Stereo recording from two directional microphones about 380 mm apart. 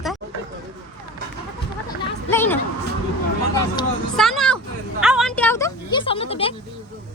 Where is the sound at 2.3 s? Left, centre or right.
Centre.